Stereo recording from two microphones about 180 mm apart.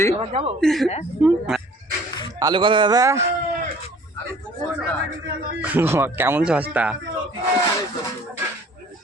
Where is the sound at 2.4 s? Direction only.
25° right (ahead or behind).